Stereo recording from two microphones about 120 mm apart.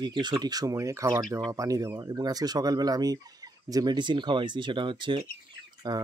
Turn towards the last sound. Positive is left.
turn(degrees=-35)  # may be behind; listen again after turning